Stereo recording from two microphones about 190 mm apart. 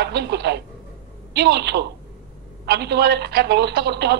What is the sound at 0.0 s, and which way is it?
A woman's voice, 60° right (ahead or behind).